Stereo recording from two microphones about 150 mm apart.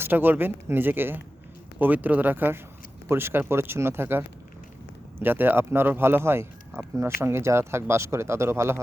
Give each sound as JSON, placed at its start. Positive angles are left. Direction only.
{"t": 0.0, "sound": "speech", "side_deg": -15}